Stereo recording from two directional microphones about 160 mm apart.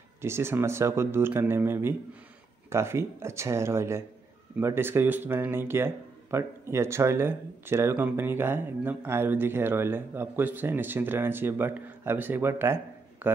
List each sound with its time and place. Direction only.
0.2 s speech: 15° right (ahead or behind)